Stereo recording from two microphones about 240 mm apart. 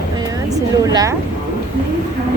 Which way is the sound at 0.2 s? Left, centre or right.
Centre.